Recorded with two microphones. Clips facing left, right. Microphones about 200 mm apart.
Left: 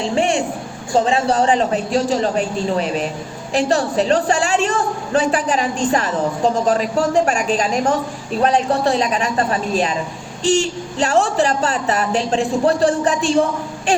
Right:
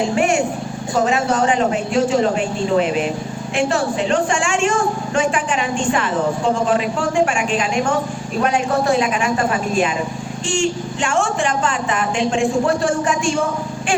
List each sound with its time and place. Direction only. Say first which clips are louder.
0.2 s vehicle: even; 30° left (ahead or behind)
0.9 s a woman's voice: left 2 dB; 30° left (ahead or behind)